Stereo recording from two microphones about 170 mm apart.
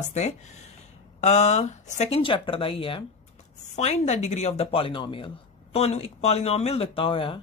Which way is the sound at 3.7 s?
40° left (ahead or behind).